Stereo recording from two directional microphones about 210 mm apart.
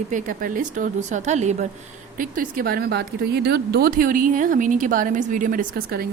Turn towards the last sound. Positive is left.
turn(degrees=-45)  # may be behind; listen again after turning